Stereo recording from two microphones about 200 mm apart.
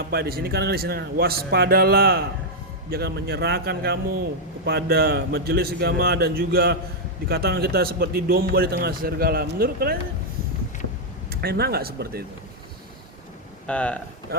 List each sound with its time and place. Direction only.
0.1 s speech: 50° right (ahead or behind)
11.3 s speech: 50° right (ahead or behind)
13.7 s speech: 5° left (ahead or behind)